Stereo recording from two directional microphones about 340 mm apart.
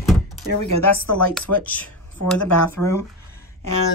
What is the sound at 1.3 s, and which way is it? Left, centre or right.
Speech, centre.